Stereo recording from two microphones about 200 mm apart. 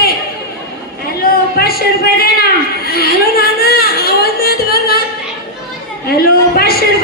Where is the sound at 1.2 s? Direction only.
50° left (ahead or behind).